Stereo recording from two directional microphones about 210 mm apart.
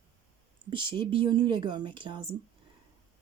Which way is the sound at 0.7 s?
25° right (ahead or behind).